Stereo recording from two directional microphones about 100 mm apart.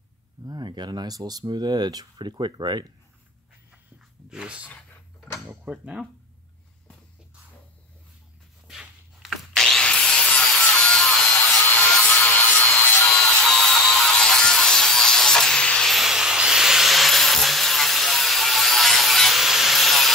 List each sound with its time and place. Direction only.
0.5 s speech: 45° right (ahead or behind)
4.3 s speech: 10° right (ahead or behind)
5.7 s speech: 10° right (ahead or behind)
8.6 s wood: 5° right (ahead or behind)